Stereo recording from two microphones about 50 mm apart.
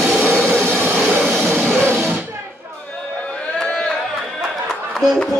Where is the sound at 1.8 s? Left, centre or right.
Right.